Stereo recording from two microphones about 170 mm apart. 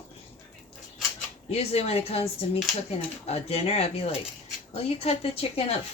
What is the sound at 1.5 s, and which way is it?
Speech, 35° left (ahead or behind).